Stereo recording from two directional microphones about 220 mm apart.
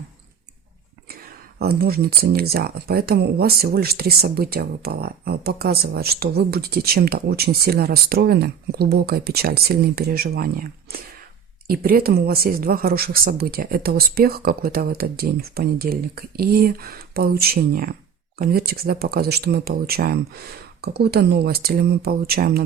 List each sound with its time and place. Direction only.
1.5 s speech: 45° right (ahead or behind)